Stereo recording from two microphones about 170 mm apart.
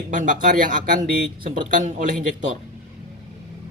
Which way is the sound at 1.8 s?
50° right (ahead or behind).